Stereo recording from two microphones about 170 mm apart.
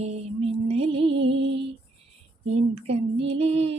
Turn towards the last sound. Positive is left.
turn(degrees=-35)  # may be behind; listen again after turning